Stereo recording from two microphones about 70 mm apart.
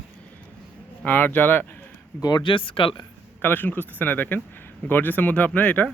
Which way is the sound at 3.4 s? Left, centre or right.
Left.